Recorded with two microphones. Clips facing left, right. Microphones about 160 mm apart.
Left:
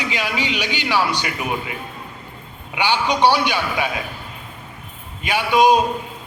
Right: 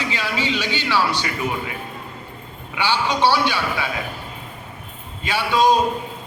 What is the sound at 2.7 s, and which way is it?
A man's voice, 15° left (ahead or behind).